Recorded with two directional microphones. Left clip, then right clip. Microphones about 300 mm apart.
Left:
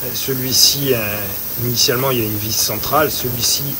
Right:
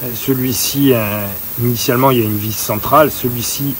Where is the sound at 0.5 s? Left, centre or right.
Centre.